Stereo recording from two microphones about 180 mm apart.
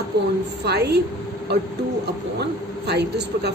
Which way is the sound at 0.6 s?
65° right (ahead or behind).